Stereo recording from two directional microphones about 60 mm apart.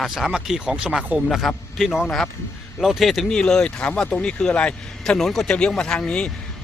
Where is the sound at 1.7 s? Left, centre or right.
Centre.